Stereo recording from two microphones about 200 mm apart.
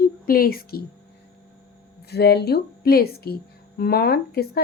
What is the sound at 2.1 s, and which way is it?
A woman's voice, 55° left (ahead or behind).